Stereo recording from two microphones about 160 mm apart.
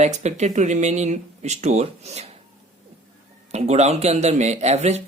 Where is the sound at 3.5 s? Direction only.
40° right (ahead or behind).